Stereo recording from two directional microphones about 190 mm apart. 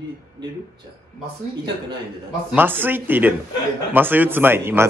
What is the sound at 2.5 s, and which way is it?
Speech, 10° right (ahead or behind).